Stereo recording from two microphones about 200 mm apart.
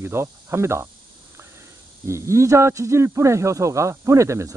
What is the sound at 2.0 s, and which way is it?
Speech, 15° right (ahead or behind).